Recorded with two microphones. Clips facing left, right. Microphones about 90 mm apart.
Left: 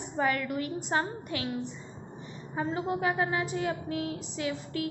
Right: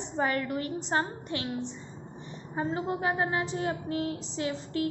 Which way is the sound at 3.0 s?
30° right (ahead or behind).